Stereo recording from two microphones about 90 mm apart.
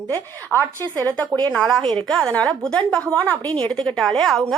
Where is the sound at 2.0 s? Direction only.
10° left (ahead or behind).